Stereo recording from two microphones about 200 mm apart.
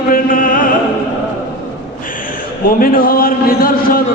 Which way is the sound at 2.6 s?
45° left (ahead or behind).